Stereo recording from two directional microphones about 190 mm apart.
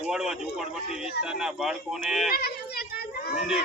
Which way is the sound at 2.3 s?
55° left (ahead or behind).